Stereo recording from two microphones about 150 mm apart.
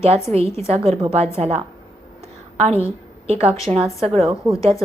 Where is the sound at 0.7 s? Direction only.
40° right (ahead or behind).